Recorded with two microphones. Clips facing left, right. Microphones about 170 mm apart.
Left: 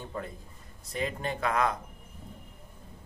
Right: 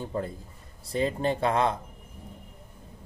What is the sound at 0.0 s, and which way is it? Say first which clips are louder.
Speech: right 6 dB; 30° right (ahead or behind).